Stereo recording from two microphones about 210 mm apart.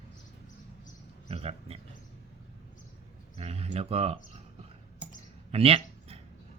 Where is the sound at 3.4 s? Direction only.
30° right (ahead or behind).